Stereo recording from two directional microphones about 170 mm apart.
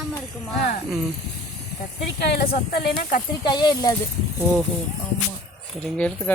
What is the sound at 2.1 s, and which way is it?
Speech, 70° left (ahead or behind).